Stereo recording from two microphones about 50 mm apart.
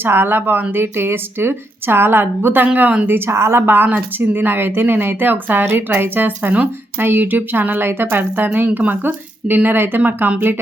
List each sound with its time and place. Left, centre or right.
0.0 s a woman's voice: right
2.7 s speech: right
3.1 s speech: right
3.7 s a woman's voice: right